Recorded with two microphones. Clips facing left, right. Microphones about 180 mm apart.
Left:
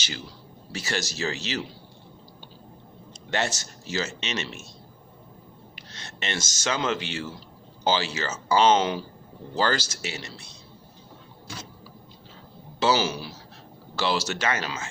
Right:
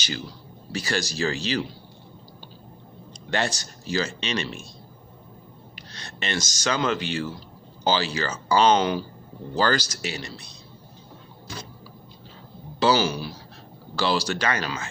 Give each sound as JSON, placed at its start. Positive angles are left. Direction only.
{"t": 0.7, "sound": "speech", "side_deg": 25}
{"t": 3.1, "sound": "speech", "side_deg": 25}
{"t": 5.7, "sound": "speech", "side_deg": 25}
{"t": 12.8, "sound": "speech", "side_deg": 25}